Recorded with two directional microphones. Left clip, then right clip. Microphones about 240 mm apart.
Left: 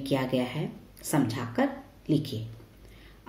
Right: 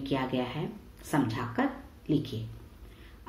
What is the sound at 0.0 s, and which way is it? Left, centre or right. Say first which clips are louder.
Speech: left 3 dB; left.